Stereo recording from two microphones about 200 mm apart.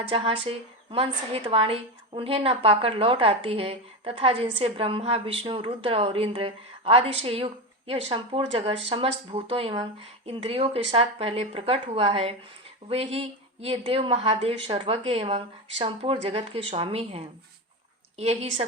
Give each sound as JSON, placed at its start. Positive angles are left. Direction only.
{"t": 0.0, "sound": "a woman's voice", "side_deg": -25}